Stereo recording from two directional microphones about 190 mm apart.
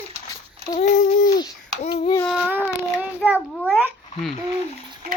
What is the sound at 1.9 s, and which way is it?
Child singing, 25° left (ahead or behind).